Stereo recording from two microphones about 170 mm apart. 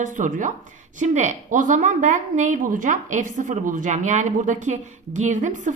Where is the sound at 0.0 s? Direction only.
50° right (ahead or behind).